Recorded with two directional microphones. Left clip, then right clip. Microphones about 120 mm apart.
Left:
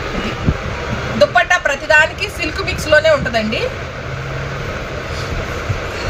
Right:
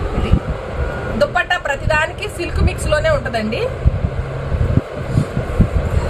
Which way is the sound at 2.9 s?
40° right (ahead or behind).